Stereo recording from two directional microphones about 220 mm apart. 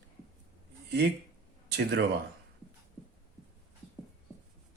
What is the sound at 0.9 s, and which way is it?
Speech, 50° right (ahead or behind).